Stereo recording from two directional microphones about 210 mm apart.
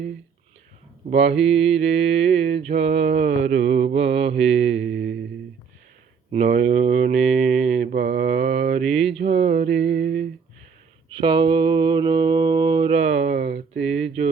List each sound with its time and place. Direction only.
1.1 s mantra: 30° right (ahead or behind)
4.8 s mantra: 45° right (ahead or behind)
6.3 s mantra: 35° right (ahead or behind)
7.9 s mantra: 50° right (ahead or behind)
9.1 s mantra: 30° right (ahead or behind)
9.8 s a sound: 50° right (ahead or behind)
11.1 s mantra: 20° right (ahead or behind)
13.3 s a sound: 55° right (ahead or behind)
13.8 s a sound: 30° right (ahead or behind)